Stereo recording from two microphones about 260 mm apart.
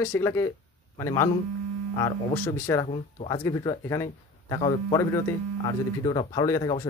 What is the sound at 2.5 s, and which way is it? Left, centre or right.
Speech, centre.